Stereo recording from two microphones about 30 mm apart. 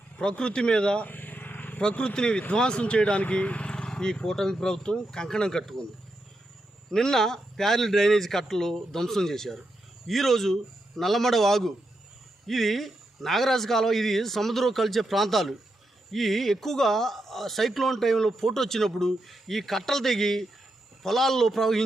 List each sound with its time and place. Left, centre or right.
0.2 s speech: left
1.0 s vehicle: left
1.9 s speech: left
2.1 s speech: left
3.2 s speech: left
3.7 s speech: left
6.9 s a man's voice: centre